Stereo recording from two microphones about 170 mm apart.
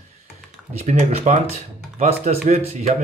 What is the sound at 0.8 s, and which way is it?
Speech, 40° right (ahead or behind).